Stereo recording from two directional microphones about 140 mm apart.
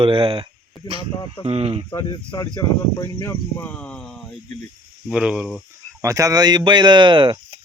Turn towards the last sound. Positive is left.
turn(degrees=-35)  # may be behind; listen again after turning